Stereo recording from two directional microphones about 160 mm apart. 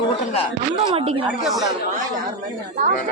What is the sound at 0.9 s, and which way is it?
Speech, 35° right (ahead or behind).